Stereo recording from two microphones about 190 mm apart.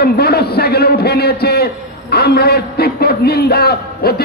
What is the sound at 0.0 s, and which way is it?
A man's voice, 55° left (ahead or behind).